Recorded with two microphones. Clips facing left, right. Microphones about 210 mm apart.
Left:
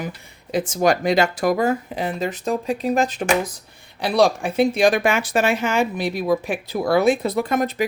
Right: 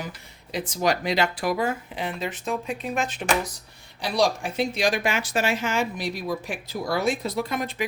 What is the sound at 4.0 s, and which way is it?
Speech, 60° left (ahead or behind).